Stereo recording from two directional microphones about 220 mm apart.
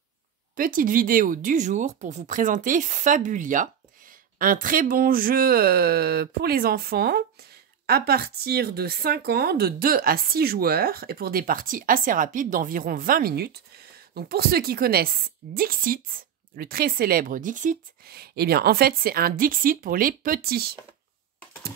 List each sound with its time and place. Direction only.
0.6 s speech: 40° right (ahead or behind)